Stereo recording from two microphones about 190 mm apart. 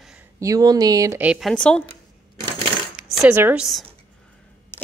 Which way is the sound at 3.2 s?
10° right (ahead or behind).